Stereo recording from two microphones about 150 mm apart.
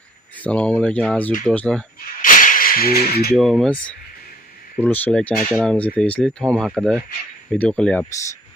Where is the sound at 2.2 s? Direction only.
60° left (ahead or behind); by 3.3 s 90° left.